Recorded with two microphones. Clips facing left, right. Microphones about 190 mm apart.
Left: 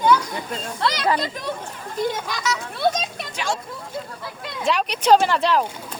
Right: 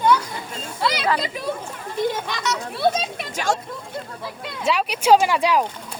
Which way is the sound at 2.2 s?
Centre (ahead or behind).